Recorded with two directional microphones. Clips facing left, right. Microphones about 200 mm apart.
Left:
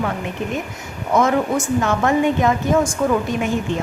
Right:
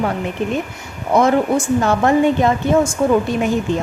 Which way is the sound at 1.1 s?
35° right (ahead or behind).